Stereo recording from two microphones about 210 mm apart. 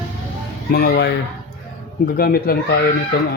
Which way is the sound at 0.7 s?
50° left (ahead or behind).